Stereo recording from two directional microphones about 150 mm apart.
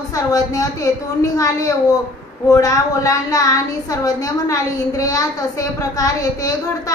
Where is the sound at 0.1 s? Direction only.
25° left (ahead or behind).